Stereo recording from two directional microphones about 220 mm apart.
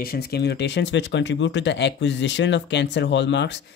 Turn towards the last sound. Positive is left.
turn(degrees=55)  # may be behind; listen again after turning